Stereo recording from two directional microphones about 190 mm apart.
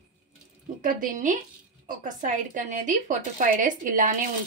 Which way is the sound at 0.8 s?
45° right (ahead or behind).